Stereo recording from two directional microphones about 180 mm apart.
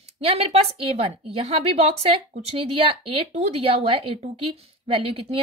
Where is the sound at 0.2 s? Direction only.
35° right (ahead or behind).